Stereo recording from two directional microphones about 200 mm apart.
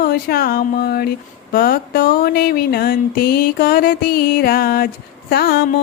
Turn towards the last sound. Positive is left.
turn(degrees=50)  # may be behind; listen again after turning